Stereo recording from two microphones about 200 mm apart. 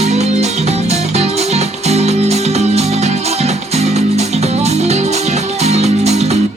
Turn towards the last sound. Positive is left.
turn(degrees=-35)  # may be behind; listen again after turning